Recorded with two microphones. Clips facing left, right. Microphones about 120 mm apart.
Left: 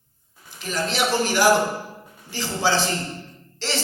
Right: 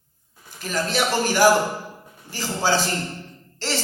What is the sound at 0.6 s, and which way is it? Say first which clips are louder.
Speech: right 1 dB; 45° right (ahead or behind).